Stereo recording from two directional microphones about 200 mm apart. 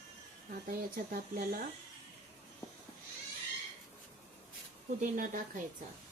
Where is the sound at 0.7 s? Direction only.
45° right (ahead or behind).